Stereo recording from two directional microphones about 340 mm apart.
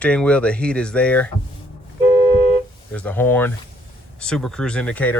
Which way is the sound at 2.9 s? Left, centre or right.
Centre.